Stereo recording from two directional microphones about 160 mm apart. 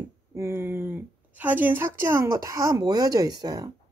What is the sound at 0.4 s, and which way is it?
Speech, 15° right (ahead or behind).